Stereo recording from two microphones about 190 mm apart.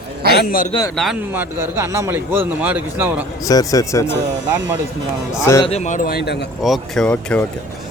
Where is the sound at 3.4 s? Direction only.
20° left (ahead or behind).